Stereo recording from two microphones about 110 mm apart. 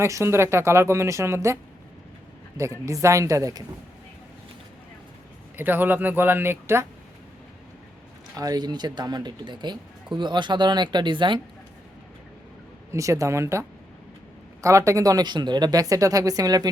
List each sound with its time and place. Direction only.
0.0 s speech: 25° right (ahead or behind)
2.6 s speech: 30° right (ahead or behind)
5.5 s speech: 20° right (ahead or behind)
8.4 s speech: 35° right (ahead or behind)
12.9 s speech: 30° right (ahead or behind)